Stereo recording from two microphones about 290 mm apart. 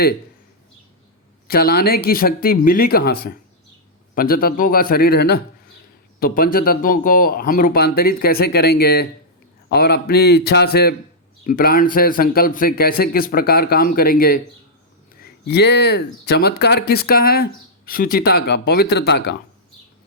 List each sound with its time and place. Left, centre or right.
1.5 s speech: left